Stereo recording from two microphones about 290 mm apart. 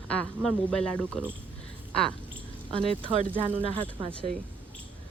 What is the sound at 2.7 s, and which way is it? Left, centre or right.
Speech, centre.